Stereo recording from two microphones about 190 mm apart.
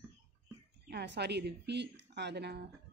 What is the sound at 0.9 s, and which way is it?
Speech, 60° right (ahead or behind).